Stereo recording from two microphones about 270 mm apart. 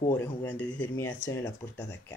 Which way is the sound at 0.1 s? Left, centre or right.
Centre.